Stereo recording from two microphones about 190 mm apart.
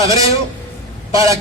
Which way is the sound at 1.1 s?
15° right (ahead or behind).